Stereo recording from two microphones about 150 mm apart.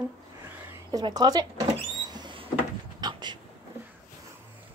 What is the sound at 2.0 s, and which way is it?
Sliding door, 30° right (ahead or behind).